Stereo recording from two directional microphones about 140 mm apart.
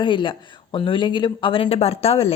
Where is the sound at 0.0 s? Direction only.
35° left (ahead or behind).